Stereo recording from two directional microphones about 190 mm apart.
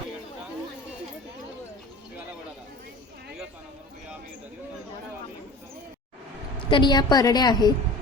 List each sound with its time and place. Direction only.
6.7 s a woman's voice: 25° left (ahead or behind)